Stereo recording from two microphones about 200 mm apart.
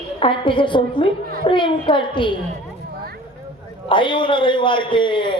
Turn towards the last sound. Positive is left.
turn(degrees=25)  # may be behind; listen again after turning